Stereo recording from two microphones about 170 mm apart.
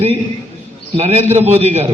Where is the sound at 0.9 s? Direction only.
40° right (ahead or behind).